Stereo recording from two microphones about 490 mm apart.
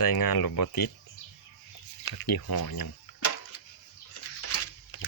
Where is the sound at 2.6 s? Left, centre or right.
Left.